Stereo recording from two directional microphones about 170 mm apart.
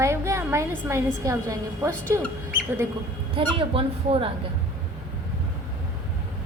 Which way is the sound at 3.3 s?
30° right (ahead or behind).